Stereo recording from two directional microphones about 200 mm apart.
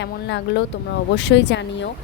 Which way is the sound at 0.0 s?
60° left (ahead or behind).